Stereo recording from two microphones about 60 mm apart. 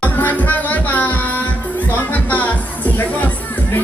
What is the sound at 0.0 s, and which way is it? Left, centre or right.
Music, left.